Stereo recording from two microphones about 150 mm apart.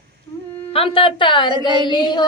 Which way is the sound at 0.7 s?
40° left (ahead or behind).